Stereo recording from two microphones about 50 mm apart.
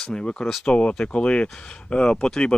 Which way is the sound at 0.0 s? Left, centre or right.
Centre.